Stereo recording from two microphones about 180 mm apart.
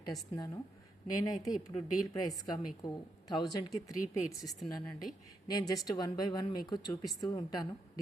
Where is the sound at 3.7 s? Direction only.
5° right (ahead or behind).